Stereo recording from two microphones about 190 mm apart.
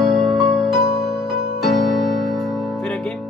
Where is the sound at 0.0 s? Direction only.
Centre (ahead or behind).